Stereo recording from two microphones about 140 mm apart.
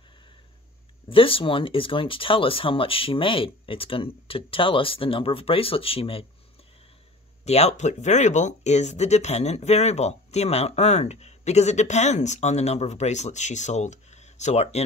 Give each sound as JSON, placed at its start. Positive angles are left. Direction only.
{"t": 1.1, "sound": "speech", "side_deg": 40}
{"t": 7.4, "sound": "speech", "side_deg": 50}